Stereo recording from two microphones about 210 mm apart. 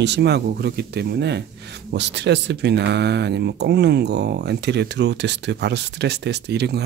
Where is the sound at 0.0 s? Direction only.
55° right (ahead or behind).